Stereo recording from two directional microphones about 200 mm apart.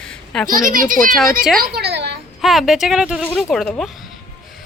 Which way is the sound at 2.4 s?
Centre (ahead or behind).